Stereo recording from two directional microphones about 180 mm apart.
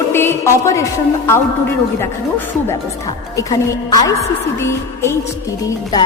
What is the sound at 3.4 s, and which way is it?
A woman's voice, 20° left (ahead or behind).